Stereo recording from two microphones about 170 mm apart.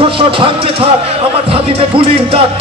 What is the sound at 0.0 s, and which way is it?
Speech, 30° right (ahead or behind).